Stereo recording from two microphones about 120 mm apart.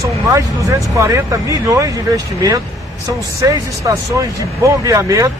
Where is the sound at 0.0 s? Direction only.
25° right (ahead or behind).